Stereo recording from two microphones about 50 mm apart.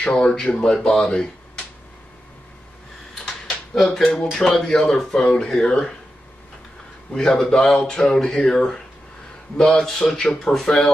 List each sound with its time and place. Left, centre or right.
0.0 s speech: centre
0.9 s a sound: centre
3.2 s speech: centre
7.2 s speech: centre